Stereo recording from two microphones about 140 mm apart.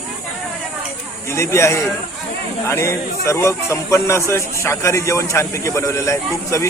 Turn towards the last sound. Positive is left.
turn(degrees=20)  # may be behind; listen again after turning